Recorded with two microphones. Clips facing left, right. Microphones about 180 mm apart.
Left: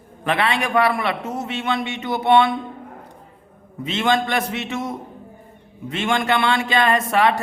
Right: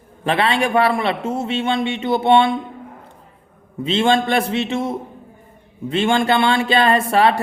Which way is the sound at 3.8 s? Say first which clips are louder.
Right 4 dB; 30° right (ahead or behind).